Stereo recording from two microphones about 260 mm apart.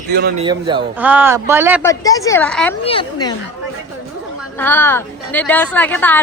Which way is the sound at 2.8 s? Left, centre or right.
Centre.